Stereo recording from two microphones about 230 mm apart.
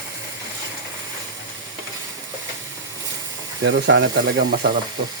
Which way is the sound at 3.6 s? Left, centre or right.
Right.